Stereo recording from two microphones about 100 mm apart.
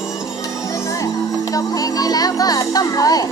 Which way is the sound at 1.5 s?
35° left (ahead or behind).